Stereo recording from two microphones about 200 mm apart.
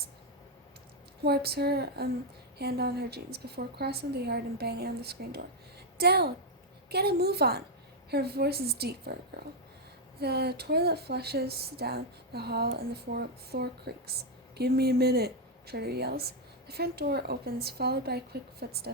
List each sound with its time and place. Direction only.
1.2 s a woman's voice: 55° right (ahead or behind)